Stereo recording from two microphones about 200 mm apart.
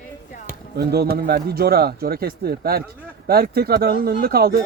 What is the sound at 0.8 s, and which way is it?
Speech, 50° right (ahead or behind).